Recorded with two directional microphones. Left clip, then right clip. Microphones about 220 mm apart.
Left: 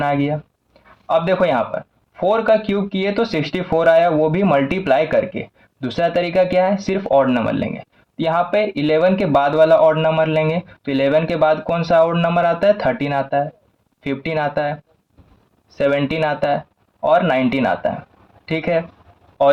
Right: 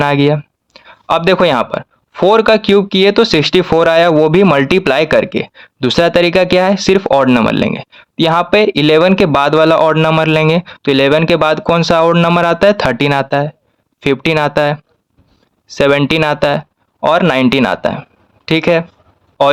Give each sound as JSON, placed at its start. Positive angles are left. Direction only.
{"t": 0.0, "sound": "a man's voice", "side_deg": -45}